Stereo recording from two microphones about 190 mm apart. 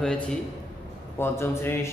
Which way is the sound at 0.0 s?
5° left (ahead or behind).